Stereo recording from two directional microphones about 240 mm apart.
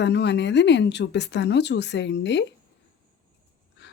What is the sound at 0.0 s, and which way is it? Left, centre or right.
Speech, left.